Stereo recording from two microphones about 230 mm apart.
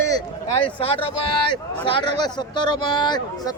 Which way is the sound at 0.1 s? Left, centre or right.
Centre.